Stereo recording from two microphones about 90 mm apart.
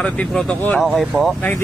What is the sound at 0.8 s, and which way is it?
Speech, centre (ahead or behind).